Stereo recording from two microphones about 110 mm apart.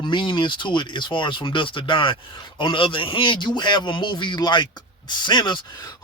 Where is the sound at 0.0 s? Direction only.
45° left (ahead or behind).